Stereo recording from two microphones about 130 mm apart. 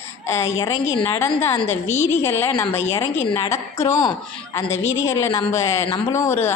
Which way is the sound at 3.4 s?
20° left (ahead or behind).